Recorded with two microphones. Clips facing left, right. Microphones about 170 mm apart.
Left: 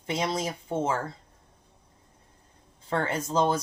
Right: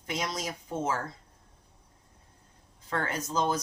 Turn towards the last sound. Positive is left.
turn(degrees=30)  # may be behind; listen again after turning